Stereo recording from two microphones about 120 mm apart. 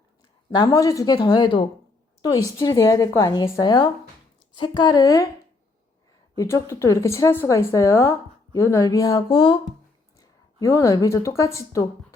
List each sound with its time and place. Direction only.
0.5 s speech: 30° left (ahead or behind)
2.2 s a woman's voice: 30° left (ahead or behind)
6.3 s a woman's voice: 25° left (ahead or behind)
10.2 s speech: 25° left (ahead or behind)